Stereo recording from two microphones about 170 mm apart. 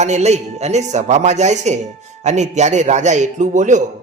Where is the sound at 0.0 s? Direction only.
40° right (ahead or behind).